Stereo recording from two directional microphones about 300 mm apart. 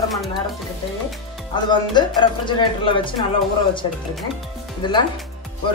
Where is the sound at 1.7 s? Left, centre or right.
Centre.